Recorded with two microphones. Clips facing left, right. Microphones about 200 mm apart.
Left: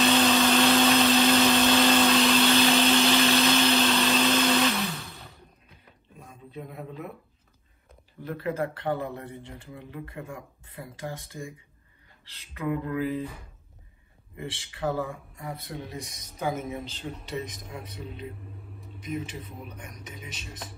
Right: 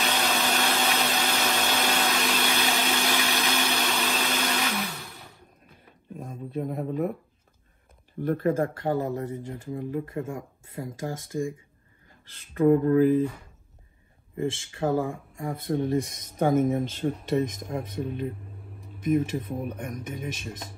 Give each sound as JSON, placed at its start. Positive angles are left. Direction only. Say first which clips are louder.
{"t": 0.0, "sound": "blender", "louder": "left 6 dB", "side_deg": -15}
{"t": 6.1, "sound": "a sound", "louder": "right 9 dB", "side_deg": -50}
{"t": 8.2, "sound": "speech", "louder": "right 6 dB", "side_deg": -50}
{"t": 12.3, "sound": "speech", "louder": "right 11 dB", "side_deg": -50}
{"t": 14.8, "sound": "speech", "louder": "right 4 dB", "side_deg": -35}
{"t": 15.3, "sound": "speech", "louder": "right 9 dB", "side_deg": -50}